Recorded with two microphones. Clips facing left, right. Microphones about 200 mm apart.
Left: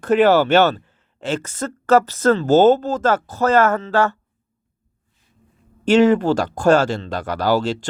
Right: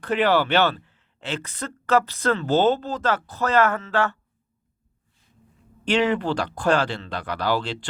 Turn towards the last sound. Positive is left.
turn(degrees=45)  # may be behind; listen again after turning